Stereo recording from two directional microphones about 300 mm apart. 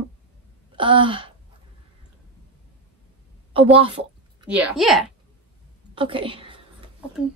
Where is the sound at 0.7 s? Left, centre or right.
Centre.